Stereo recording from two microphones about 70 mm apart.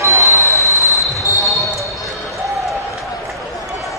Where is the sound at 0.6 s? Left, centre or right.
Left.